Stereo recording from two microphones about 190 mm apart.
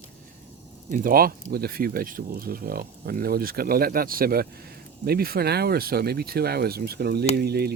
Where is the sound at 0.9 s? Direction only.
45° right (ahead or behind).